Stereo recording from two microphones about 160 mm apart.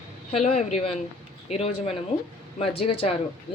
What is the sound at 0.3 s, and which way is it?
Speech, 40° left (ahead or behind).